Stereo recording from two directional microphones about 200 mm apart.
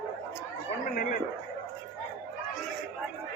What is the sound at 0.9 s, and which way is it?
Speech, 40° left (ahead or behind).